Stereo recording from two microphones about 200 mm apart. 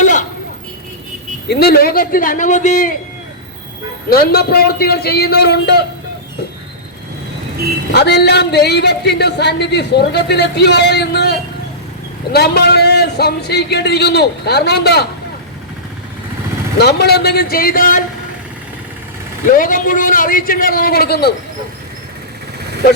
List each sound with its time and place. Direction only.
0.0 s vehicle: 40° left (ahead or behind)
1.5 s a man's voice: 55° left (ahead or behind)
4.1 s a man's voice: 50° left (ahead or behind)
7.9 s a man's voice: 55° left (ahead or behind)
16.7 s a man's voice: 55° left (ahead or behind)
19.5 s a man's voice: 45° left (ahead or behind)